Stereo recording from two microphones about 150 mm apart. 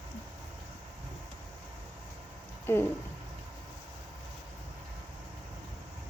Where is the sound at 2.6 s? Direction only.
15° left (ahead or behind).